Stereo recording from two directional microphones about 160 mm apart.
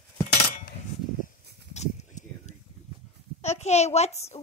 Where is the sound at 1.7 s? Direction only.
45° left (ahead or behind).